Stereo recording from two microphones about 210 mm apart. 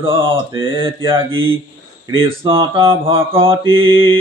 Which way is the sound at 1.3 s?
70° right (ahead or behind).